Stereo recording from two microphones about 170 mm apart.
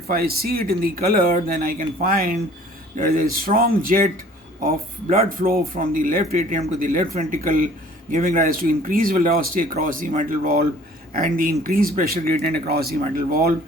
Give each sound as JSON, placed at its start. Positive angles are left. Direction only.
{"t": 0.1, "sound": "speech", "side_deg": -65}